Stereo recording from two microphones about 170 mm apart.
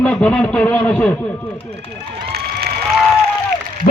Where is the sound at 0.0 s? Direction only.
5° left (ahead or behind).